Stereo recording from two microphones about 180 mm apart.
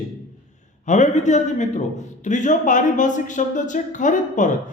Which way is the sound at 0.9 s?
40° left (ahead or behind).